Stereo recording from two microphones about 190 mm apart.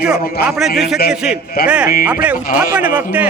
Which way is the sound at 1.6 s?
5° right (ahead or behind).